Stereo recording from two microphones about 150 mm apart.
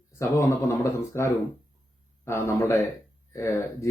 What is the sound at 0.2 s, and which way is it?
Speech, 15° left (ahead or behind).